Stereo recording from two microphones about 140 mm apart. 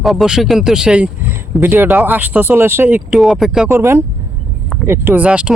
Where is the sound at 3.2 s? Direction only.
Centre (ahead or behind).